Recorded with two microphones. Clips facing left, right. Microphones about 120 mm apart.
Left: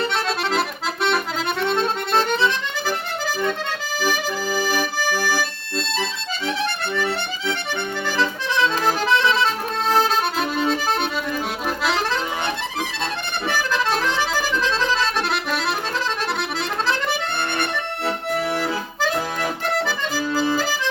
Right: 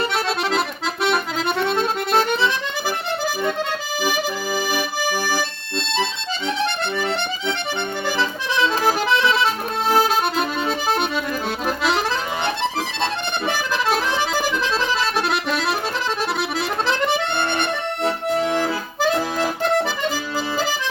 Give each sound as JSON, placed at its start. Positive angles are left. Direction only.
{"t": 1.0, "sound": "accordion", "side_deg": -5}
{"t": 4.0, "sound": "accordion", "side_deg": -15}
{"t": 6.9, "sound": "music", "side_deg": -20}
{"t": 8.5, "sound": "accordion", "side_deg": -10}
{"t": 10.7, "sound": "music", "side_deg": -10}
{"t": 13.0, "sound": "accordion", "side_deg": -20}
{"t": 15.3, "sound": "accordion", "side_deg": 0}
{"t": 16.8, "sound": "accordion", "side_deg": -20}
{"t": 19.8, "sound": "accordion", "side_deg": -20}